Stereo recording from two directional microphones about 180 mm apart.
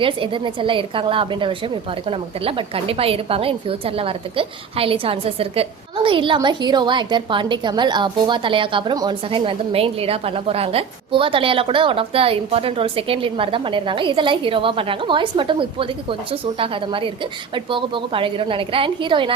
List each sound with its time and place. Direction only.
0.0 s a woman's voice: 30° right (ahead or behind)